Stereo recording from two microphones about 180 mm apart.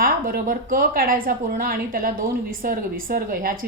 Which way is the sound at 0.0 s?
55° right (ahead or behind).